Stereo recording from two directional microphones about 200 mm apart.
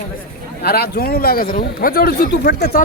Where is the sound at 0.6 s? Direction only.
50° left (ahead or behind).